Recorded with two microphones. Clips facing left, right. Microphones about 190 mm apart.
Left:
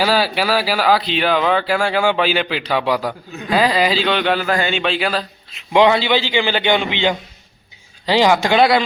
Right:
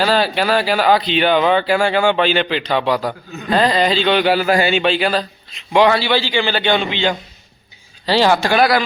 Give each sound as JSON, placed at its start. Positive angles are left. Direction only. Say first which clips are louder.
{"t": 0.0, "sound": "speech", "louder": "right 1 dB", "side_deg": 5}
{"t": 5.7, "sound": "a man's voice", "louder": "even", "side_deg": 20}